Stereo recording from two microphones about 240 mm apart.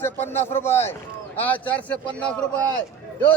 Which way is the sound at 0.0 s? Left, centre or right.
Centre.